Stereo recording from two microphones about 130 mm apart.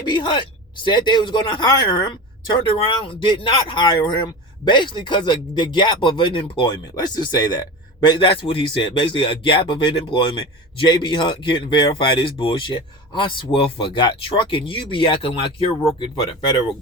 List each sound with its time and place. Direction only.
0.0 s speech: 35° left (ahead or behind)